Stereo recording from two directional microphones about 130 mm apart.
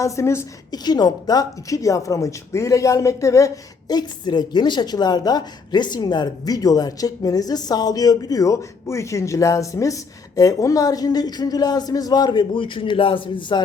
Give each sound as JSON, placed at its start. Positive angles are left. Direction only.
{"t": 0.0, "sound": "a woman's voice", "side_deg": 20}
{"t": 0.7, "sound": "a woman's voice", "side_deg": 30}